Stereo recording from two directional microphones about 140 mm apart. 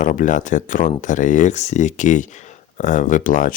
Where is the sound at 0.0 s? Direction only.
65° left (ahead or behind).